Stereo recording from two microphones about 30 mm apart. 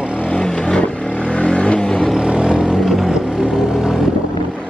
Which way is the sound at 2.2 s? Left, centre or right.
Right.